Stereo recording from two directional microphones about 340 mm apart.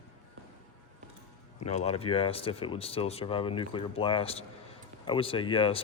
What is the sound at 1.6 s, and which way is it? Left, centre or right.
Speech, centre.